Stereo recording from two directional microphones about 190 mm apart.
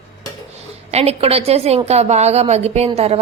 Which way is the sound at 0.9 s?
35° right (ahead or behind).